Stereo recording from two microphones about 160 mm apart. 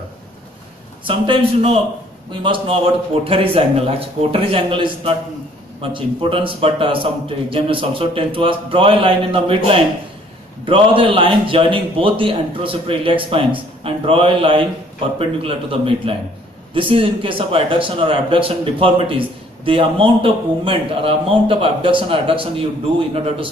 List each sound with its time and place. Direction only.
1.0 s a man's voice: 35° right (ahead or behind)